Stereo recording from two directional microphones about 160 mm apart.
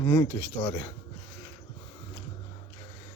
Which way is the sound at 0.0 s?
20° left (ahead or behind).